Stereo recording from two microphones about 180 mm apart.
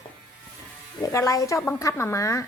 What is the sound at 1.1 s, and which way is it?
Speech, 20° left (ahead or behind).